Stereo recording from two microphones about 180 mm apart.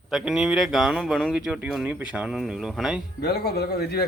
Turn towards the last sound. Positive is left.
turn(degrees=60)  # may be behind; listen again after turning